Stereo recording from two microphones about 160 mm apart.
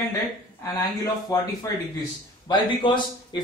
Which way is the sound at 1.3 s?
20° left (ahead or behind).